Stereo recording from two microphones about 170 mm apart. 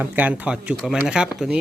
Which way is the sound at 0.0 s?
10° right (ahead or behind).